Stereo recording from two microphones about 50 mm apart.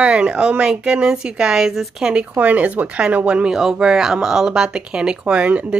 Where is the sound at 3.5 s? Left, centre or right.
Centre.